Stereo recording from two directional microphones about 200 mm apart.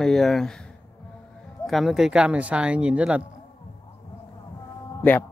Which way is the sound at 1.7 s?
Centre (ahead or behind).